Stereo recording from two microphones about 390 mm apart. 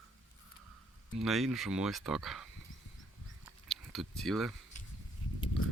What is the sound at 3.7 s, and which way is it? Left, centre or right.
Speech, centre.